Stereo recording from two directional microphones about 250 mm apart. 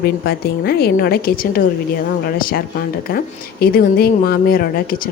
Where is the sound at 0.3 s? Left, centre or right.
Left.